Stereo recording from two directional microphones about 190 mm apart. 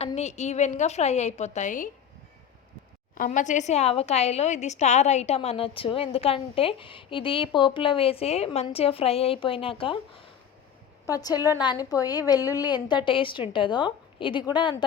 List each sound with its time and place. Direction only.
0.0 s a woman's voice: 35° left (ahead or behind)
3.2 s a woman's voice: 40° left (ahead or behind); by 10.0 s 25° left (ahead or behind)
11.0 s a woman's voice: 20° left (ahead or behind)